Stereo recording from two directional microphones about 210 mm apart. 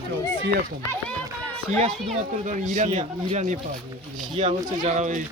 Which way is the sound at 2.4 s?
35° right (ahead or behind).